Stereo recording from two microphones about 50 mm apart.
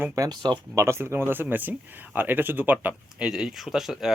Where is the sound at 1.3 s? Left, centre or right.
Right.